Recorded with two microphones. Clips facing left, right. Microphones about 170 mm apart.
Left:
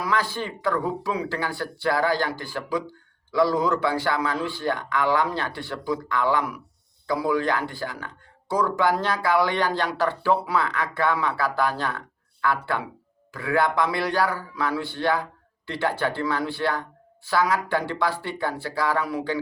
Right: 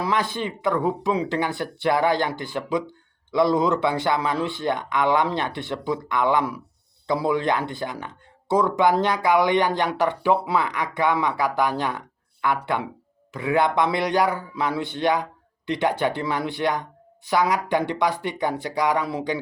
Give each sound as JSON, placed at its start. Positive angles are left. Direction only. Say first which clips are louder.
{"t": 0.0, "sound": "speech", "louder": "right 2 dB", "side_deg": -20}